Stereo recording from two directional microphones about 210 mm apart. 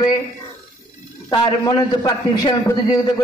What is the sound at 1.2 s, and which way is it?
A man's voice, 20° left (ahead or behind).